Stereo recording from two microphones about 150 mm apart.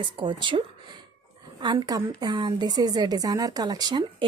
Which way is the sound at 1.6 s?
25° right (ahead or behind).